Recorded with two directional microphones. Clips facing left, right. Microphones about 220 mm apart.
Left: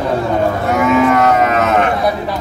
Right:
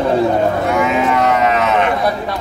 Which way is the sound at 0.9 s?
45° left (ahead or behind).